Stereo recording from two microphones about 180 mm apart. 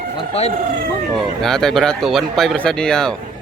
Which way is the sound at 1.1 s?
Centre (ahead or behind).